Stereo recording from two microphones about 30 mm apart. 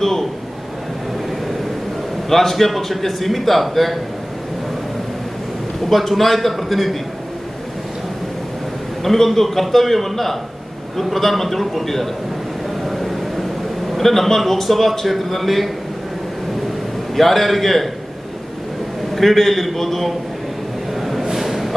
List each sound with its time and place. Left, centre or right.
0.0 s a sound: centre
2.3 s a man's voice: centre
5.9 s a man's voice: centre
9.0 s a man's voice: centre
12.9 s a sound: centre
13.9 s a man's voice: centre
17.2 s a man's voice: centre
19.1 s a man's voice: centre
20.9 s a sound: centre